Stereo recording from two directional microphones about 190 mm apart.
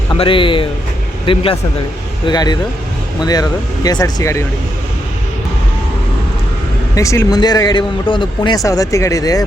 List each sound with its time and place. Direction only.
0.1 s a man's voice: 25° left (ahead or behind)
6.9 s speech: 15° left (ahead or behind)